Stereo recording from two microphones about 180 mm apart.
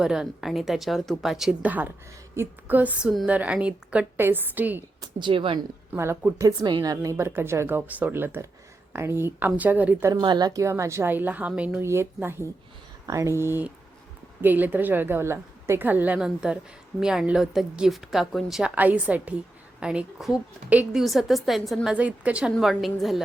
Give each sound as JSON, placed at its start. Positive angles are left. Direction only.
{"t": 0.0, "sound": "a woman's voice", "side_deg": -5}
{"t": 4.9, "sound": "a woman's voice", "side_deg": -30}
{"t": 5.9, "sound": "a woman's voice", "side_deg": -10}